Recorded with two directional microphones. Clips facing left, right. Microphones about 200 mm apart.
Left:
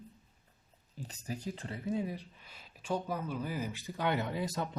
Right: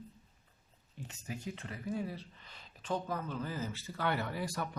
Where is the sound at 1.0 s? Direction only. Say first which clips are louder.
Left 3 dB; 35° left (ahead or behind).